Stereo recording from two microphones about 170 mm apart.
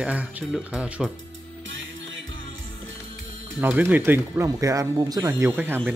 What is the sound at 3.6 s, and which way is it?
Speech, 10° right (ahead or behind).